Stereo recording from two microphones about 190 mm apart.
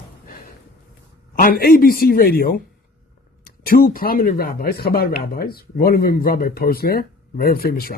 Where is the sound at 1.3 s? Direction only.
50° left (ahead or behind).